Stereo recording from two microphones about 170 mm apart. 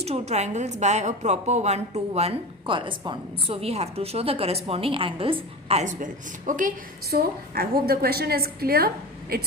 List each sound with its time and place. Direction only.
0.0 s a woman's voice: 40° right (ahead or behind); by 9.5 s 60° right (ahead or behind)